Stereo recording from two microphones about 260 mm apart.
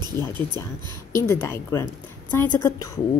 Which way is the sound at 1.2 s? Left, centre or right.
Centre.